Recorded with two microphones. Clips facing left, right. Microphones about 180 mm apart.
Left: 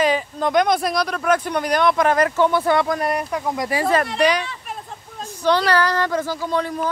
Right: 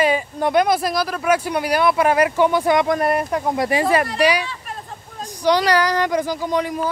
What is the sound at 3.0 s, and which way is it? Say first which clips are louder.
Speech: right 3 dB; 50° right (ahead or behind).